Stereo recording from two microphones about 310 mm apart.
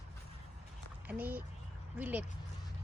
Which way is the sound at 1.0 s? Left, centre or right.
Centre.